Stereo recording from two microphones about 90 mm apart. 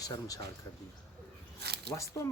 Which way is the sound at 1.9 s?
35° left (ahead or behind).